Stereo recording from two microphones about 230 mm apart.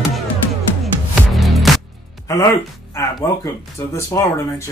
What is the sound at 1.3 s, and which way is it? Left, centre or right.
Music, centre.